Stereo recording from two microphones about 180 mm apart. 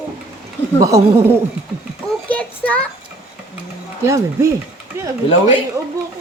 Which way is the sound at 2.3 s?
10° left (ahead or behind).